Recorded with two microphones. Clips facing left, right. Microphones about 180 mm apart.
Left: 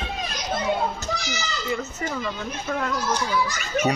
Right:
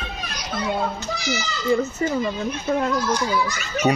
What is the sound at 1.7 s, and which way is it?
A child's voice, 30° right (ahead or behind).